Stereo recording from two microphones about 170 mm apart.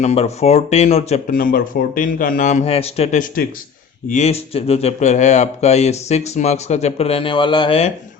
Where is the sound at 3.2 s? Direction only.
55° left (ahead or behind).